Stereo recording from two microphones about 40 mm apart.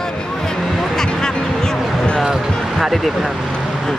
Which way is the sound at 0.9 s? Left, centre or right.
Centre.